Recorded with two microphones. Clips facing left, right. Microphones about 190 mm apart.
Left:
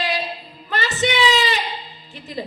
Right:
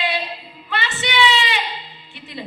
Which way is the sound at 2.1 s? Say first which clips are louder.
Left 4 dB; 40° left (ahead or behind).